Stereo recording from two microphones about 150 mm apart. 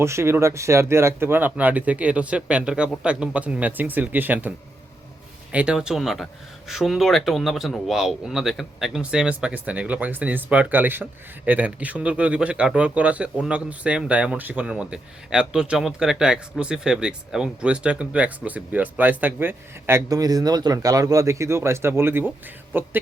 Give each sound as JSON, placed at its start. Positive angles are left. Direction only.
{"t": 0.0, "sound": "speech", "side_deg": -15}
{"t": 20.1, "sound": "speech", "side_deg": -25}